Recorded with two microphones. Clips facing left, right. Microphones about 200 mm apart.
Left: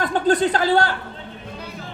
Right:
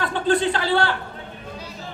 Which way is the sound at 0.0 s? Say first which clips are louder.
Left 2 dB; 40° left (ahead or behind).